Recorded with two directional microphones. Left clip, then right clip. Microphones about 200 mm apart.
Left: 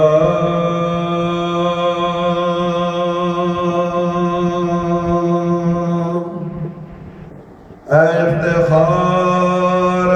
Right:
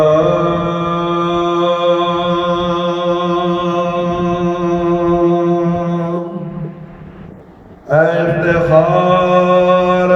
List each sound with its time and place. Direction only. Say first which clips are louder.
0.1 s mantra: right 2 dB; 40° right (ahead or behind)
7.9 s mantra: even; 40° right (ahead or behind)